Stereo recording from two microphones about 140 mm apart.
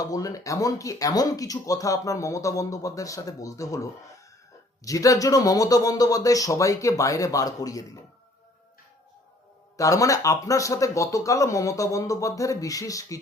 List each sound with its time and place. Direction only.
0.0 s speech: 25° left (ahead or behind)
9.7 s speech: 25° left (ahead or behind)